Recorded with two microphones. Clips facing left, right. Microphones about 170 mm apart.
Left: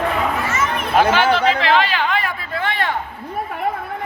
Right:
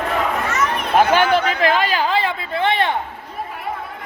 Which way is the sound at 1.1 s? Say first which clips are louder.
Even; 50° right (ahead or behind).